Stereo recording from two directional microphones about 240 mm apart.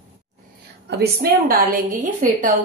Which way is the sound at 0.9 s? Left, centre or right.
Right.